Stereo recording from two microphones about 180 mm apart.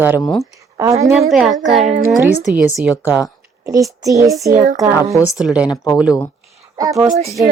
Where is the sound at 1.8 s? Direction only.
40° right (ahead or behind).